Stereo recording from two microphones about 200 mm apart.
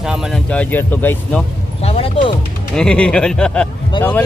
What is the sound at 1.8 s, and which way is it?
Speech, 30° left (ahead or behind).